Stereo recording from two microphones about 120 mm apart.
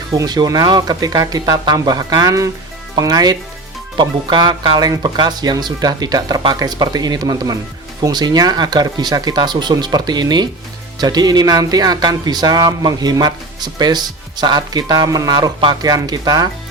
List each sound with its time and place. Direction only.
0.1 s speech: 30° right (ahead or behind)